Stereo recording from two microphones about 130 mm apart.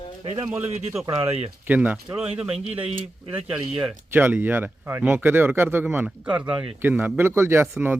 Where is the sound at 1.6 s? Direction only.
10° right (ahead or behind).